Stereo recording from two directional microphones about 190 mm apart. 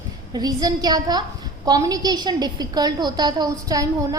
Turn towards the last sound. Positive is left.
turn(degrees=-20)  # may be behind; listen again after turning